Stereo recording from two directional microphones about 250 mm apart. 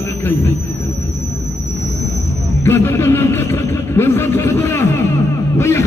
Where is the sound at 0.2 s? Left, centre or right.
Centre.